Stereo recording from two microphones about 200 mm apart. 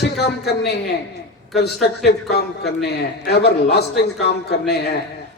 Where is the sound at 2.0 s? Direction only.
55° left (ahead or behind).